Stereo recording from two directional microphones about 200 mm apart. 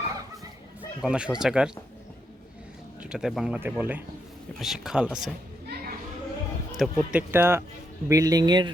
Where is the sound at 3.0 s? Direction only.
5° right (ahead or behind).